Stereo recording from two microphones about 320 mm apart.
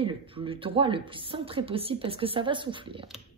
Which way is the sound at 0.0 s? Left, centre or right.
Centre.